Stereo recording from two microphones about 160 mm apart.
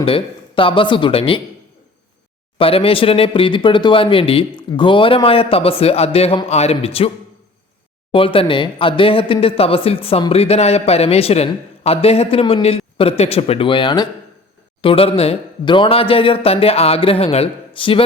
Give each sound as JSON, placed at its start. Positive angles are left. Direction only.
{"t": 0.0, "sound": "speech", "side_deg": 35}
{"t": 2.6, "sound": "speech", "side_deg": 35}
{"t": 8.1, "sound": "speech", "side_deg": 35}